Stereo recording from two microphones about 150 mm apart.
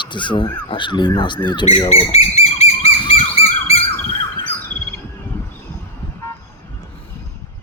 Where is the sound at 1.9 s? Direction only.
45° left (ahead or behind).